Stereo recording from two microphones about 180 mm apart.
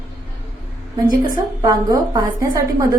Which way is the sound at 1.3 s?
20° right (ahead or behind).